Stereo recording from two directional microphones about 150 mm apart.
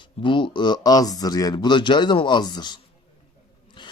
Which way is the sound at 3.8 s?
30° left (ahead or behind).